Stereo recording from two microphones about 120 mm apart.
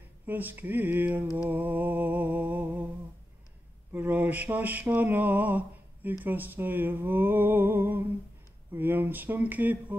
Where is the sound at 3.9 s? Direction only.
15° right (ahead or behind).